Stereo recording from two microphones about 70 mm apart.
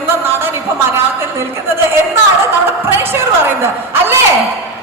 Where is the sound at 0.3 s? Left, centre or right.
Right.